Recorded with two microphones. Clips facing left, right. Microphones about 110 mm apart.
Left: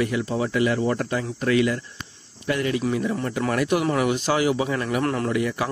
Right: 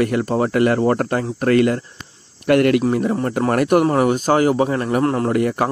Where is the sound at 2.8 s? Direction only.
45° right (ahead or behind).